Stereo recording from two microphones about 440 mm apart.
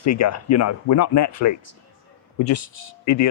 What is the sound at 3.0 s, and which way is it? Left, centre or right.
Speech, left.